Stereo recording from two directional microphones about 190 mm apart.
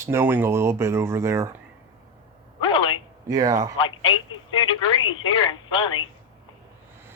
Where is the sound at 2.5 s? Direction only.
25° left (ahead or behind).